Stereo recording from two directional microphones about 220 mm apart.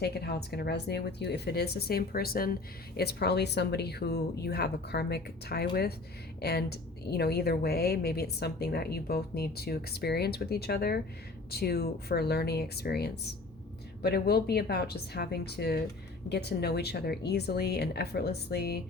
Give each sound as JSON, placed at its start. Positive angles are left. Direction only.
{"t": 0.0, "sound": "a woman's voice", "side_deg": 45}